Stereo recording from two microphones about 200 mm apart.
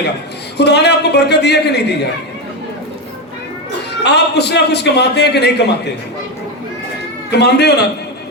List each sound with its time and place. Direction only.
0.5 s a man's voice: 55° left (ahead or behind)
4.0 s a man's voice: 55° left (ahead or behind)
7.3 s a man's voice: 55° left (ahead or behind)